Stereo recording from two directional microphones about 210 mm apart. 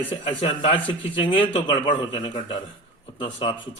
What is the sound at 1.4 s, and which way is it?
Speech, 20° left (ahead or behind).